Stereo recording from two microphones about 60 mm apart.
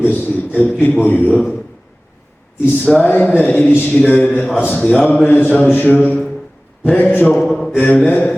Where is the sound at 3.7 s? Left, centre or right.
Left.